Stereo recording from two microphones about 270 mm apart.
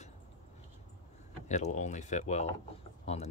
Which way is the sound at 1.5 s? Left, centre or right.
Left.